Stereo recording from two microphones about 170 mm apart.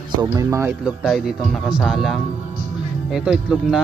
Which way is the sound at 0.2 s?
20° right (ahead or behind).